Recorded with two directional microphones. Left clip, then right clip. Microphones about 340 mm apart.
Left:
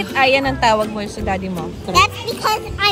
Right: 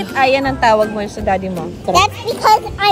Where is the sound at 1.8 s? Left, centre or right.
Centre.